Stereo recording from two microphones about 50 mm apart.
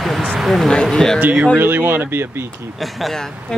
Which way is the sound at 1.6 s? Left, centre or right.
Right.